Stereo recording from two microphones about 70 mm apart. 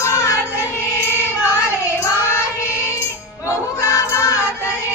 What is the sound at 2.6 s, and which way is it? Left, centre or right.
Music, left.